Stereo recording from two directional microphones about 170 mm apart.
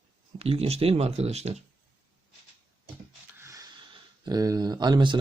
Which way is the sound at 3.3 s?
15° right (ahead or behind).